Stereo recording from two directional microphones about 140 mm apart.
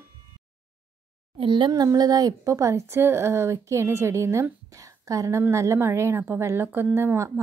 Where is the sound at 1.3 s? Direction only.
35° right (ahead or behind).